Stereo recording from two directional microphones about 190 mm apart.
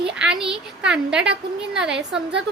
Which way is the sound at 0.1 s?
5° right (ahead or behind).